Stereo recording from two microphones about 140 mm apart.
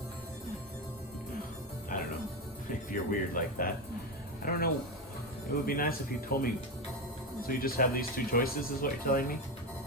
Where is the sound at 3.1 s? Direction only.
85° left.